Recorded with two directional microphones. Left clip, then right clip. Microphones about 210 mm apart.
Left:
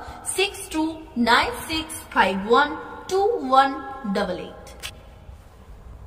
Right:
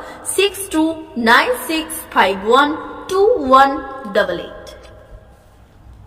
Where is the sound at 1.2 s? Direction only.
15° right (ahead or behind).